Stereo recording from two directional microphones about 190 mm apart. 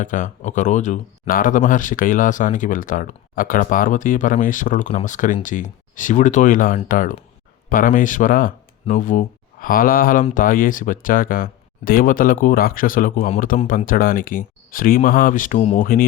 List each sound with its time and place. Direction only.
0.0 s speech: 40° left (ahead or behind)